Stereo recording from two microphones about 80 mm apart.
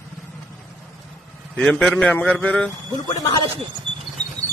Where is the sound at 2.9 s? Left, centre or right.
Left.